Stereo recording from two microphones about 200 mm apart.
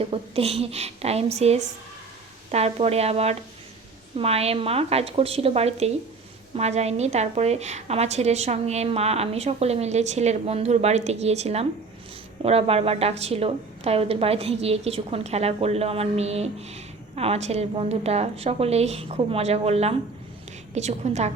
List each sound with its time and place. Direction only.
0.0 s a woman's voice: 30° right (ahead or behind)